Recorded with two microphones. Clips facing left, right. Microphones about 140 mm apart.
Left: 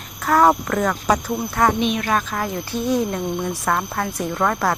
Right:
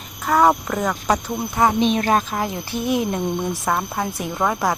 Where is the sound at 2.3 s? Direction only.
20° right (ahead or behind).